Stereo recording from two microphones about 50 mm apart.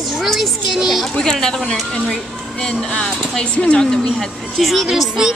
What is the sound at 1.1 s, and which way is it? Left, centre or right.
A woman's voice, centre.